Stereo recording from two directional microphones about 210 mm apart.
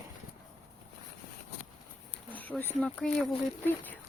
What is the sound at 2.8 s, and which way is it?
Speech, 5° left (ahead or behind).